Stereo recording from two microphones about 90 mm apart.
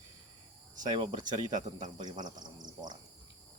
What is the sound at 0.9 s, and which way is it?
Speech, 55° right (ahead or behind).